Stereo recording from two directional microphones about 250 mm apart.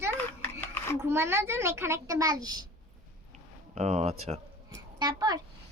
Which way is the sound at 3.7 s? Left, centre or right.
Right.